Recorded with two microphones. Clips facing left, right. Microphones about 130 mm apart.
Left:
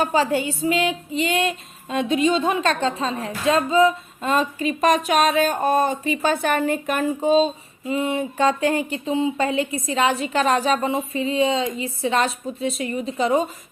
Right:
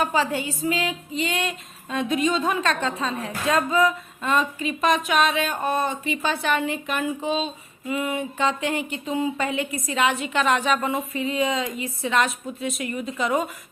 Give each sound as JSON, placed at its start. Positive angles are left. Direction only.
{"t": 0.0, "sound": "a woman's voice", "side_deg": 35}